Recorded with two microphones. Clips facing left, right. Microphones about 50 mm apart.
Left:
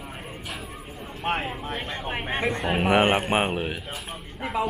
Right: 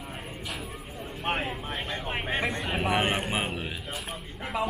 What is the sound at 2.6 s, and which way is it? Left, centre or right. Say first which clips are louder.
A man's voice: left 10 dB; left.